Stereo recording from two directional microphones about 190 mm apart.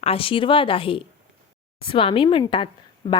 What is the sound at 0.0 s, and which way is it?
Speech, 30° left (ahead or behind).